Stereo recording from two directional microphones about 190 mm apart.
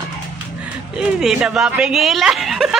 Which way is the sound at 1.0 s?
5° right (ahead or behind).